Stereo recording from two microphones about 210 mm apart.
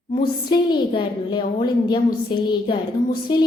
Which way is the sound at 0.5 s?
20° left (ahead or behind).